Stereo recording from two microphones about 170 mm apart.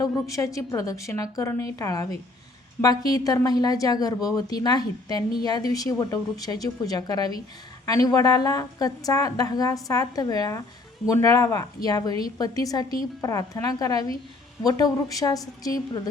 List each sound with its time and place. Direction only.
0.0 s a woman's voice: 20° left (ahead or behind)